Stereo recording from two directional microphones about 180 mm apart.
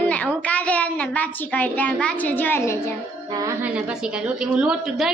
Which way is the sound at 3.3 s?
20° right (ahead or behind).